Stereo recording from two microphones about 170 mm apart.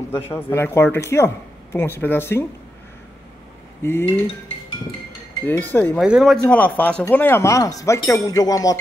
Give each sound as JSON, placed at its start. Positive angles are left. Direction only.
{"t": 0.3, "sound": "speech", "side_deg": 15}
{"t": 3.8, "sound": "speech", "side_deg": 15}
{"t": 5.4, "sound": "speech", "side_deg": 10}
{"t": 5.9, "sound": "speech", "side_deg": -5}